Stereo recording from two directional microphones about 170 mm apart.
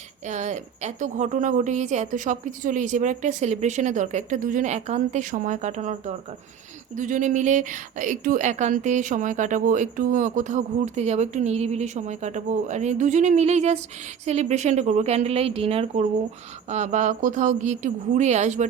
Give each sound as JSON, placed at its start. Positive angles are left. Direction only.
{"t": 0.3, "sound": "a woman's voice", "side_deg": -45}